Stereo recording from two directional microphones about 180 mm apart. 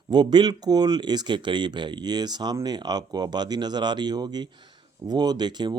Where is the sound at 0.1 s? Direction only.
25° right (ahead or behind).